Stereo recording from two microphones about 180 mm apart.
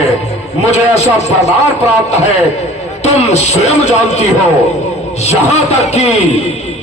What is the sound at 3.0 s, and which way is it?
A man's voice, 35° left (ahead or behind).